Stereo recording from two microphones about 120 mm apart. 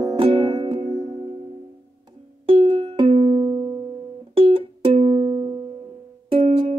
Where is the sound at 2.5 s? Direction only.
50° right (ahead or behind).